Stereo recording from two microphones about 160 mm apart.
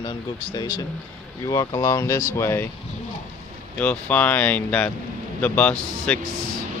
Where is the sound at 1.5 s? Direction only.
25° left (ahead or behind).